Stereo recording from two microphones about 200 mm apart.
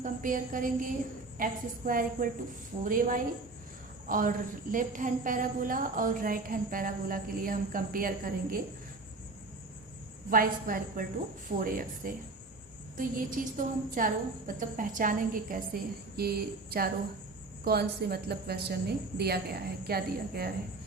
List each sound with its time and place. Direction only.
0.0 s a woman's voice: 40° right (ahead or behind)
10.2 s a woman's voice: 45° right (ahead or behind)
17.7 s a woman's voice: 55° right (ahead or behind)